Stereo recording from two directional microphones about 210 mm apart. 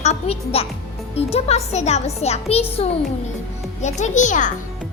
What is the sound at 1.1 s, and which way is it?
A child's voice, 30° left (ahead or behind).